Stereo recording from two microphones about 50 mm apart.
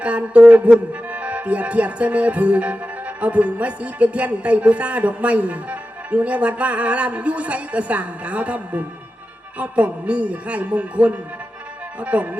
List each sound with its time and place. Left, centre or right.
0.0 s speech: right